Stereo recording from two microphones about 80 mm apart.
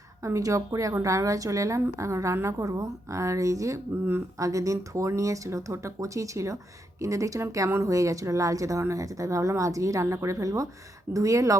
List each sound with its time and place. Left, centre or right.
0.2 s speech: right